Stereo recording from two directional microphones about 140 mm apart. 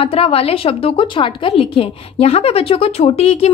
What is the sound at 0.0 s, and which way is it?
A woman's voice, 45° left (ahead or behind).